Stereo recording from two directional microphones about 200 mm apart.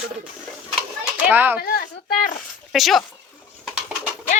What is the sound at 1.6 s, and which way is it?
Speech, 45° left (ahead or behind).